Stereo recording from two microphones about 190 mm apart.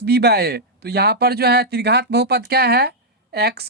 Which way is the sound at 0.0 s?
60° right (ahead or behind).